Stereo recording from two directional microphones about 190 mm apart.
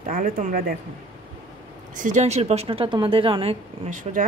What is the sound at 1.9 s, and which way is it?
Speech, 40° right (ahead or behind).